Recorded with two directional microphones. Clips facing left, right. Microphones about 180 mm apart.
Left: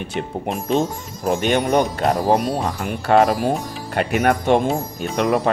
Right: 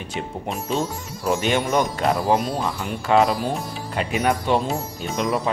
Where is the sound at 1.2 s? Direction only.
50° left (ahead or behind).